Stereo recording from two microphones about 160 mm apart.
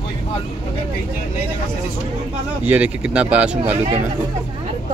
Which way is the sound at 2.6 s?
10° right (ahead or behind).